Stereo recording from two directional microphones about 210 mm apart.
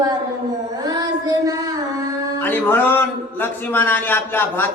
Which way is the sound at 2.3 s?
10° left (ahead or behind).